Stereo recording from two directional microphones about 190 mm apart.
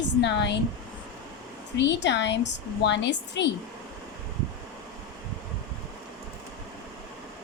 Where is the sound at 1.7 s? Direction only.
65° left (ahead or behind).